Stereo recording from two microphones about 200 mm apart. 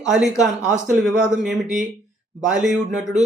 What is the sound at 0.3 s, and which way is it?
Speech, centre (ahead or behind).